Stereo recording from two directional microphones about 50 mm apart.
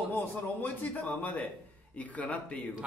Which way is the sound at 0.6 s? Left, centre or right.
Left.